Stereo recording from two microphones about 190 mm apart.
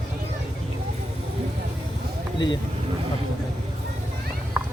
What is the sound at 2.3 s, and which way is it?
Speech, 25° left (ahead or behind).